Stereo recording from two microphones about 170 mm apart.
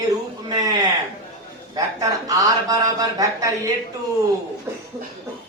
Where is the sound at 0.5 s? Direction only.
20° right (ahead or behind).